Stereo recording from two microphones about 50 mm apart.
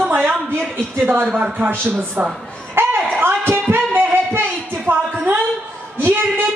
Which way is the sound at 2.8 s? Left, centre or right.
Right.